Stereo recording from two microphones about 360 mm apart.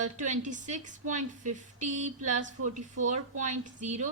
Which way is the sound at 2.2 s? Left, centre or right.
Right.